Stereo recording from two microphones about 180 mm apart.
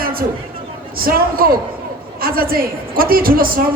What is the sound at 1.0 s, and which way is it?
A man's voice, 55° right (ahead or behind).